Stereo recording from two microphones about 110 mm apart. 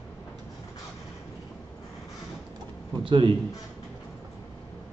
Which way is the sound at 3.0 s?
50° right (ahead or behind).